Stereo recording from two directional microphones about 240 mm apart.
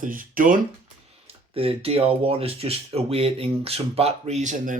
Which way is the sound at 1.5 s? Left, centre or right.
Right.